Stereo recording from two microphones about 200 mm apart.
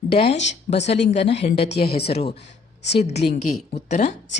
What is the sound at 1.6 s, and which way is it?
Speech, 55° left (ahead or behind).